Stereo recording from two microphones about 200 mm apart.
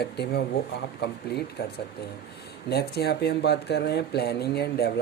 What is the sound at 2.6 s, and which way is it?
A man's voice, 55° left (ahead or behind).